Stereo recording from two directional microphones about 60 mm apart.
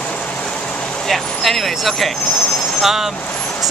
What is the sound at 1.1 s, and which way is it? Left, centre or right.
Speech, centre.